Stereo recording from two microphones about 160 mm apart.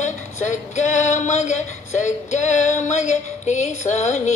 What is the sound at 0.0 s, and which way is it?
Female singing, 50° left (ahead or behind).